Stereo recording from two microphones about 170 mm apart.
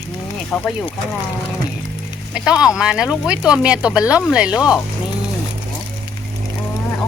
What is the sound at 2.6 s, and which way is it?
Speech, 5° right (ahead or behind).